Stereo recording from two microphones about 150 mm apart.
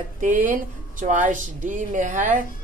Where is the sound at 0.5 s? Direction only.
60° right (ahead or behind).